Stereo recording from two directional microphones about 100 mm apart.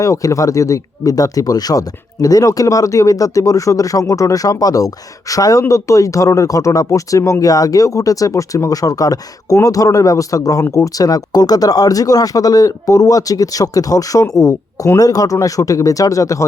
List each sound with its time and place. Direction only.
0.0 s speech: 35° left (ahead or behind)